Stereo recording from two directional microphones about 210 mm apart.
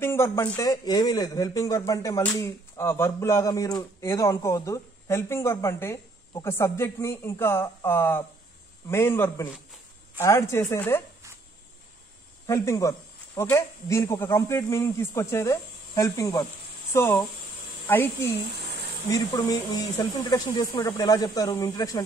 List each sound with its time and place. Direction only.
0.0 s speech: 10° left (ahead or behind)
12.4 s speech: 15° left (ahead or behind)